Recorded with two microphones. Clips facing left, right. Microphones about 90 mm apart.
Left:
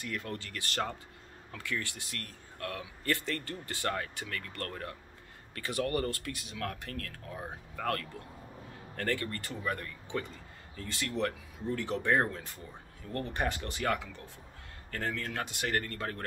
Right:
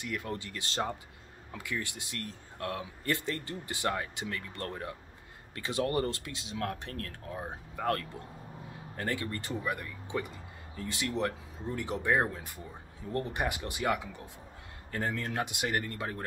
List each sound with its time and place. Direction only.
0.0 s speech: 20° right (ahead or behind)